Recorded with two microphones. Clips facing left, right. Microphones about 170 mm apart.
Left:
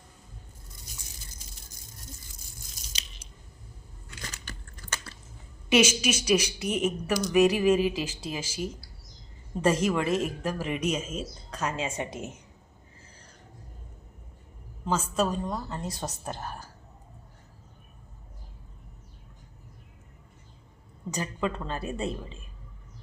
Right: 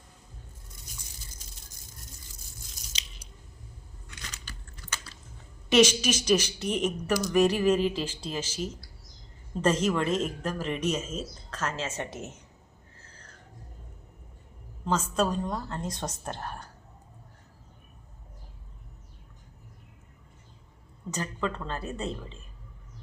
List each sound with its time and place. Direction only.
4.2 s chewing: 50° left (ahead or behind)
5.6 s speech: 5° left (ahead or behind)
14.8 s a woman's voice: 5° left (ahead or behind)
21.1 s speech: 15° left (ahead or behind)